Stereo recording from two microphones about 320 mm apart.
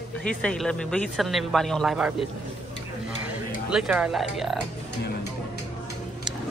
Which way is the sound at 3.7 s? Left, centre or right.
Centre.